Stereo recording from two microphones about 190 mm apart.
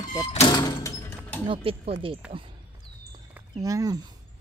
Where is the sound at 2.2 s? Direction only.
5° right (ahead or behind).